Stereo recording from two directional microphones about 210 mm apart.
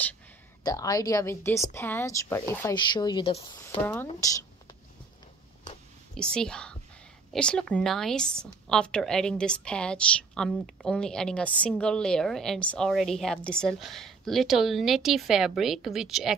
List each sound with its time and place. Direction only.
0.7 s speech: 15° left (ahead or behind)
6.1 s a woman's voice: 5° left (ahead or behind)